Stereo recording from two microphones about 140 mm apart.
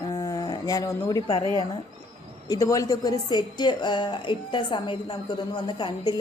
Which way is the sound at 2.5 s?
25° left (ahead or behind).